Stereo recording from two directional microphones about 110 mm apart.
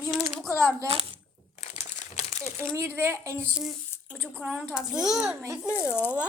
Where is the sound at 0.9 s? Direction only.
60° right (ahead or behind).